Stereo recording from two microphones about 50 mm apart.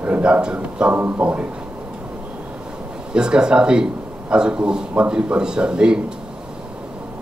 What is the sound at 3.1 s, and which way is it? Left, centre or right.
A man's voice, centre.